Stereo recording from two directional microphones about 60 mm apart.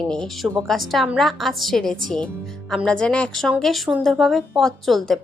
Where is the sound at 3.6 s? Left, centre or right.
Centre.